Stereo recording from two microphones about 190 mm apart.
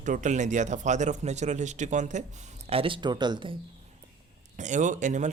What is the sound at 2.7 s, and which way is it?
Speech, 30° right (ahead or behind).